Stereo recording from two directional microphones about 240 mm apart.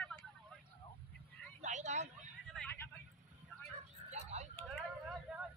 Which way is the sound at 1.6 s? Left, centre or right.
Right.